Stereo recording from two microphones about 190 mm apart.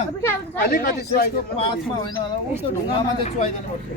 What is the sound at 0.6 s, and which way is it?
Speech, 50° left (ahead or behind).